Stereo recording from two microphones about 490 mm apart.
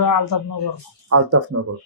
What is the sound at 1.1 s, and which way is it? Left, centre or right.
Speech, right.